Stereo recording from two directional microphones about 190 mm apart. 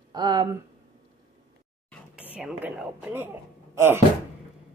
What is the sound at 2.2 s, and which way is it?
A woman's voice, 5° right (ahead or behind).